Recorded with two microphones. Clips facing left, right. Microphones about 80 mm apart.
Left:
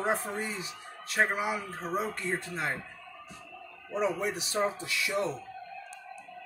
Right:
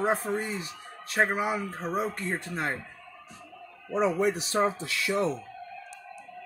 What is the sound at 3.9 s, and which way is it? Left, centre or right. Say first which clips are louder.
Speech: right 5 dB; right.